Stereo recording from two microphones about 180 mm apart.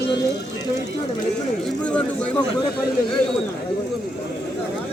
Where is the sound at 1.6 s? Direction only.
5° left (ahead or behind).